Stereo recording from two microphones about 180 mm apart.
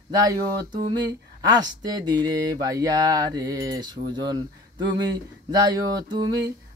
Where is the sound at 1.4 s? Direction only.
20° right (ahead or behind).